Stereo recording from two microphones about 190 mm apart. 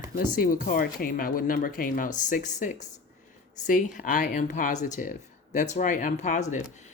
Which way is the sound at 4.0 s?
45° left (ahead or behind).